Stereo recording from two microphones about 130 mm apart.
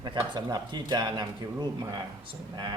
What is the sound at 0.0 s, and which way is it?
A man's voice, 30° right (ahead or behind).